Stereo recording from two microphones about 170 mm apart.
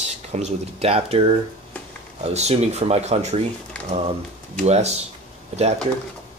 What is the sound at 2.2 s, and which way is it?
Speech, 40° right (ahead or behind).